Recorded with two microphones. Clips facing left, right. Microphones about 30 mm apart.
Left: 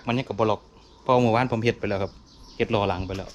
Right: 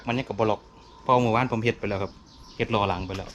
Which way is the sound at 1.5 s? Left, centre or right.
Left.